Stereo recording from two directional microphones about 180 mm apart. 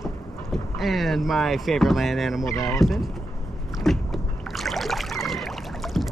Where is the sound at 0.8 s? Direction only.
Centre (ahead or behind).